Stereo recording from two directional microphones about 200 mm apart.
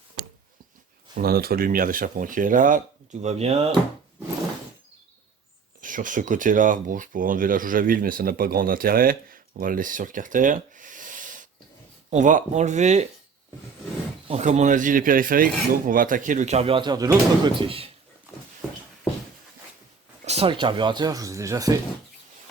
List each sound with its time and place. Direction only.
1.1 s speech: 50° right (ahead or behind); by 3.8 s 30° right (ahead or behind)
5.8 s speech: 40° right (ahead or behind)
14.3 s speech: 35° right (ahead or behind)
20.2 s speech: 30° right (ahead or behind)